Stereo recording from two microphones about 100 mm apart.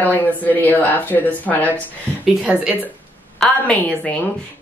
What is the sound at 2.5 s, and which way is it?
Speech, 15° right (ahead or behind).